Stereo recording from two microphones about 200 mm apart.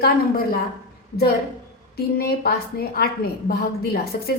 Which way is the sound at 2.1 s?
50° left (ahead or behind).